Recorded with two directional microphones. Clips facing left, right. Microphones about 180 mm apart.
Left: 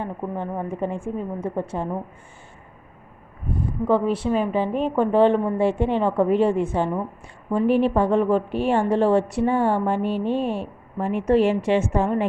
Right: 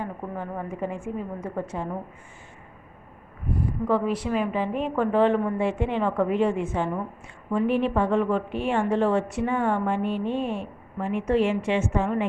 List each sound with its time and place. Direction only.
0.0 s a woman's voice: 25° left (ahead or behind)
3.8 s a woman's voice: 30° left (ahead or behind)